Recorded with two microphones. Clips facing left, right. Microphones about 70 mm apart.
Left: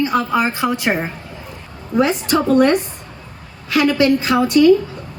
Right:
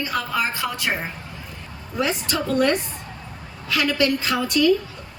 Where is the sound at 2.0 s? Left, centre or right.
Left.